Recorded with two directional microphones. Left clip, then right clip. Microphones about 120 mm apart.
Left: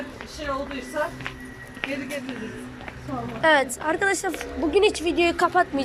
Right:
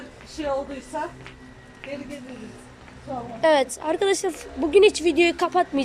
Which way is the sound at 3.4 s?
30° right (ahead or behind).